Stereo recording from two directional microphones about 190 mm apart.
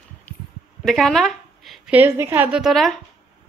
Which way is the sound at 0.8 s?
Centre (ahead or behind).